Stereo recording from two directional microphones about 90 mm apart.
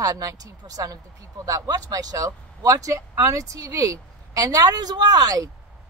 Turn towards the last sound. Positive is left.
turn(degrees=-45)  # may be behind; listen again after turning